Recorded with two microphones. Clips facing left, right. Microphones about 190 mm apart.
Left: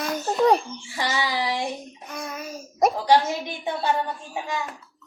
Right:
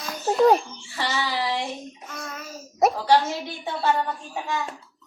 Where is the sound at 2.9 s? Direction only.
15° left (ahead or behind).